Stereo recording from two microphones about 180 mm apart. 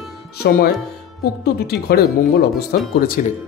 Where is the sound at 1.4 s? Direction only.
60° left (ahead or behind).